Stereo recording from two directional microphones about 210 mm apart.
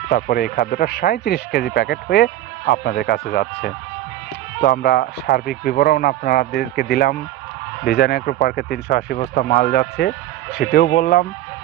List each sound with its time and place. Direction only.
0.1 s speech: 45° left (ahead or behind)